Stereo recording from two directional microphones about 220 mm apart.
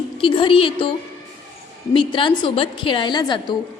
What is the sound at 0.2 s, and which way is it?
A woman's voice, 25° left (ahead or behind).